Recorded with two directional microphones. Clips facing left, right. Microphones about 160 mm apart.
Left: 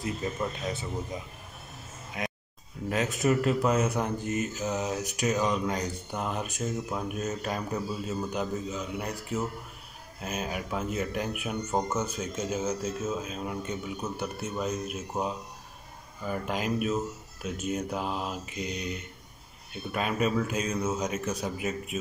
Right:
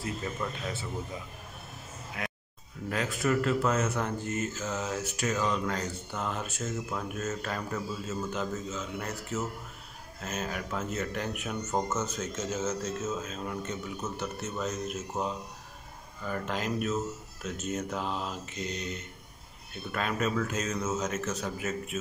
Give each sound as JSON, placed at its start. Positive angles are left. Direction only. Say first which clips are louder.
{"t": 2.2, "sound": "speech", "louder": "left 5 dB", "side_deg": 20}